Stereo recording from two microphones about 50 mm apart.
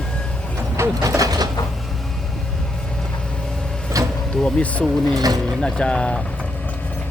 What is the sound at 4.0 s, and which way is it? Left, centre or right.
Vehicle, right.